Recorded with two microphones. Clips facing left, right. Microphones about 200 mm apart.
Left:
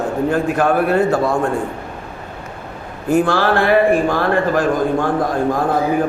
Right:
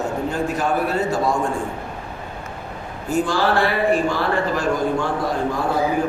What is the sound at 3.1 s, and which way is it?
A man's voice, 60° left (ahead or behind).